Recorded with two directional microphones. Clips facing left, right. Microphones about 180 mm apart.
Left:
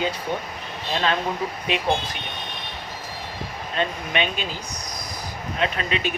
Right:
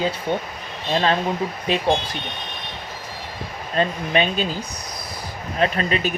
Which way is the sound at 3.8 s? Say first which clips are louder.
Right 5 dB; 35° right (ahead or behind).